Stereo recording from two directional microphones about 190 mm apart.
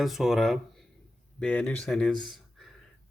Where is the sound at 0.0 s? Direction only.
Centre (ahead or behind).